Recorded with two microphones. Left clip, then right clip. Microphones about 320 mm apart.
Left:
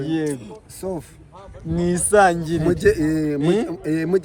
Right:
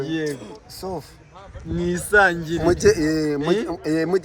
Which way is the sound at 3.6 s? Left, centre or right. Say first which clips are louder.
Right 1 dB; centre.